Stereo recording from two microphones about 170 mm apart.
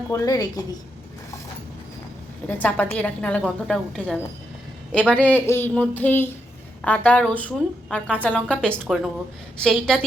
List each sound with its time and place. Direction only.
0.1 s a woman's voice: 20° left (ahead or behind)
2.5 s a woman's voice: 10° left (ahead or behind)